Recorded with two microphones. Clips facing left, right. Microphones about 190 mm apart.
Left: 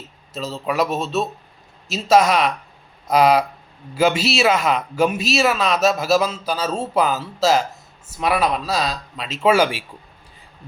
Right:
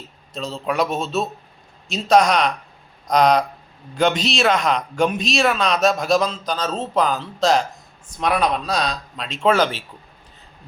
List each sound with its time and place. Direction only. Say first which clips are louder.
0.3 s a man's voice: left 1 dB; centre (ahead or behind)